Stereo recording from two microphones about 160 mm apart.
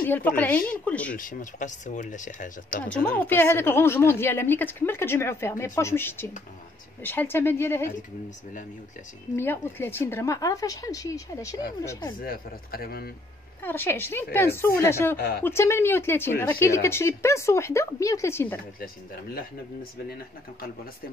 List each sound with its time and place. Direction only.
0.0 s speech: 10° left (ahead or behind)
1.1 s speech: 55° left (ahead or behind)
2.7 s speech: 10° left (ahead or behind)
9.3 s a woman's voice: 15° left (ahead or behind)
12.2 s speech: 65° left (ahead or behind)
13.6 s speech: 15° left (ahead or behind)
15.1 s speech: 70° left (ahead or behind)
15.4 s speech: 15° left (ahead or behind)